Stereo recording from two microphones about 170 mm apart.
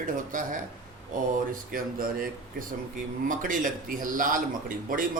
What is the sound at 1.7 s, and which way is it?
A man's voice, 55° right (ahead or behind).